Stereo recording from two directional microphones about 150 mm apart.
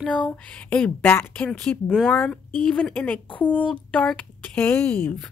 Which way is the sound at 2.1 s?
10° left (ahead or behind).